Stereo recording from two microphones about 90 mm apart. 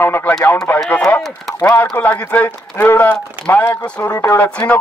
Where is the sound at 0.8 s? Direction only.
15° left (ahead or behind).